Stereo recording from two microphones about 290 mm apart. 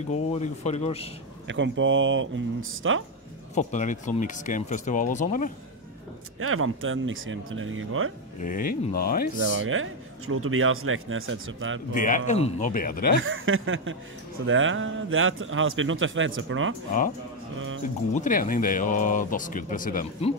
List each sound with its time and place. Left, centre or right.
0.3 s speech: left
1.5 s speech: right
3.5 s speech: left
6.4 s speech: right
8.4 s speech: left
9.7 s speech: right
11.9 s speech: left
13.2 s speech: right
18.1 s speech: left